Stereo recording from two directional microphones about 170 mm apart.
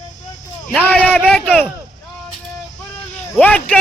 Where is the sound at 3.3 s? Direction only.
5° left (ahead or behind).